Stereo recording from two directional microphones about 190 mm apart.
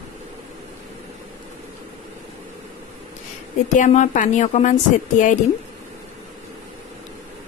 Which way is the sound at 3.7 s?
40° left (ahead or behind).